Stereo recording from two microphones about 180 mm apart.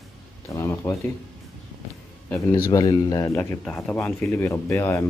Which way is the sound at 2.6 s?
20° left (ahead or behind).